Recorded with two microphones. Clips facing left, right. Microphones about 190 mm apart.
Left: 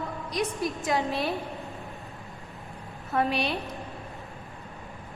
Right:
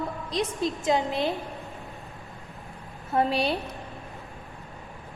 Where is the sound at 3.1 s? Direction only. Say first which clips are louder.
Right 2 dB; 25° right (ahead or behind).